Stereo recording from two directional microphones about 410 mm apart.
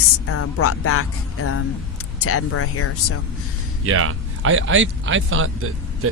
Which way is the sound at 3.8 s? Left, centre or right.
Right.